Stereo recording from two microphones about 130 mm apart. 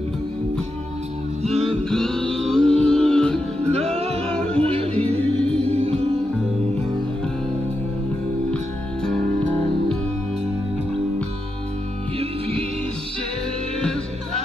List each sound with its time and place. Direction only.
1.4 s music: 50° right (ahead or behind)
1.9 s music: 5° left (ahead or behind)
3.8 s music: 55° right (ahead or behind)
4.3 s music: 10° left (ahead or behind)
4.6 s music: 50° right (ahead or behind)
5.2 s music: 10° left (ahead or behind)
5.6 s music: 50° right (ahead or behind)
9.0 s music: 5° left (ahead or behind)
12.2 s music: 45° right (ahead or behind)